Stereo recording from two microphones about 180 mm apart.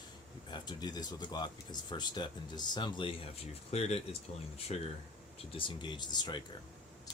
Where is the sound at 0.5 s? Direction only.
25° left (ahead or behind).